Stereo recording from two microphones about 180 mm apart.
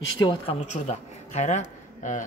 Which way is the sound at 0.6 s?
40° left (ahead or behind).